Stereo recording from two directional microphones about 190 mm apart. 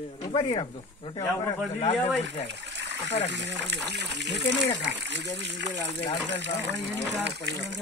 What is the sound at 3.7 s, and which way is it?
Speech, 65° right (ahead or behind).